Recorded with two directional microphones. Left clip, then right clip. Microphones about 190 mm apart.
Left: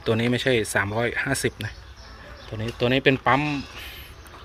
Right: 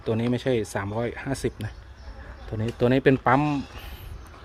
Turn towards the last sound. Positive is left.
turn(degrees=-30)  # may be behind; listen again after turning